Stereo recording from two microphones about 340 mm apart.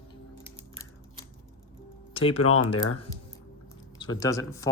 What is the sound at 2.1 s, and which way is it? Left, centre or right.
Music, centre.